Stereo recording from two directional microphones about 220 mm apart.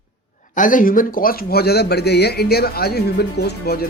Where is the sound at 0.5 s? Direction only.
35° left (ahead or behind).